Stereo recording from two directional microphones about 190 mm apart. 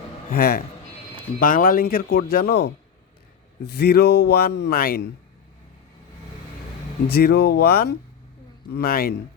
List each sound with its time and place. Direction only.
0.3 s a man's voice: 55° left (ahead or behind)
7.1 s a man's voice: 55° left (ahead or behind)